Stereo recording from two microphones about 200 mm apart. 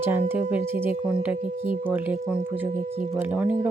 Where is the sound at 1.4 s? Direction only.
40° right (ahead or behind).